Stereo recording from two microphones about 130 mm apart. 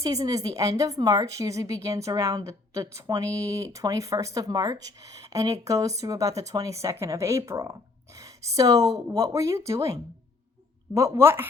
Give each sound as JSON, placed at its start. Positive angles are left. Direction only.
{"t": 0.0, "sound": "speech", "side_deg": -25}